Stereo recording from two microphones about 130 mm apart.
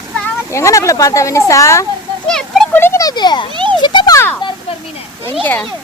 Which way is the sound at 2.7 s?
20° left (ahead or behind).